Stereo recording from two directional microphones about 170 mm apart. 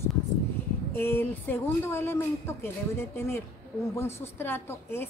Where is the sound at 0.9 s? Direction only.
10° left (ahead or behind).